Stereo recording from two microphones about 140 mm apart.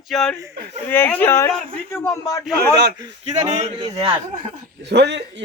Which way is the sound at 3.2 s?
55° right (ahead or behind).